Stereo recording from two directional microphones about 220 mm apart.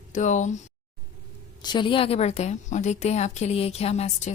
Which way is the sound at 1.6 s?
20° left (ahead or behind).